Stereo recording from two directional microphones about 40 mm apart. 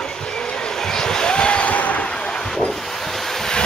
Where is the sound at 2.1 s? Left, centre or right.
Left.